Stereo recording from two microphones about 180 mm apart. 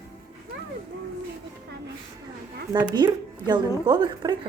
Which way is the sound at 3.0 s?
25° right (ahead or behind).